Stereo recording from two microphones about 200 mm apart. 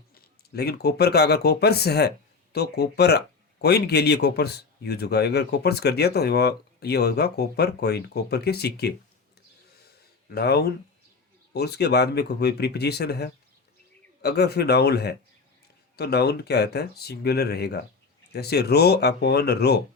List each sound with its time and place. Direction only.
0.1 s speech: 50° left (ahead or behind)
10.2 s speech: 55° left (ahead or behind)